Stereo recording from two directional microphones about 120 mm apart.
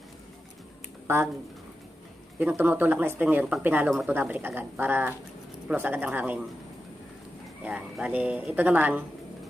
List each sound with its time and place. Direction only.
1.0 s speech: 20° right (ahead or behind)
2.3 s speech: 15° right (ahead or behind)
7.6 s speech: 10° right (ahead or behind)